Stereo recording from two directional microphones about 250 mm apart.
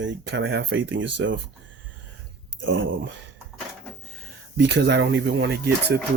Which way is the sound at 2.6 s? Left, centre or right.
Right.